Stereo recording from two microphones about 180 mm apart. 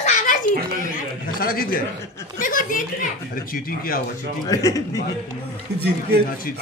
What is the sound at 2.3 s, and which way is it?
Chuckle, 50° left (ahead or behind).